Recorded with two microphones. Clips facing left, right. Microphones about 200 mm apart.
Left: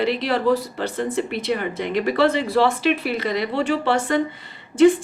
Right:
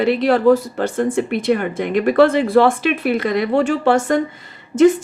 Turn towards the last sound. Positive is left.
turn(degrees=-45)  # may be behind; listen again after turning